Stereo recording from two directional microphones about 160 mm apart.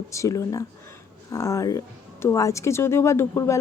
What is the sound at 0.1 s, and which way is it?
A woman's voice, 20° left (ahead or behind).